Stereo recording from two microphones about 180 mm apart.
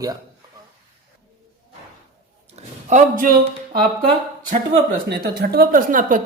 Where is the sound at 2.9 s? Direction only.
50° right (ahead or behind).